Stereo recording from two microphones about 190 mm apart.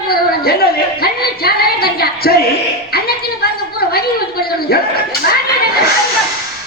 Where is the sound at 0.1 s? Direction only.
55° left (ahead or behind).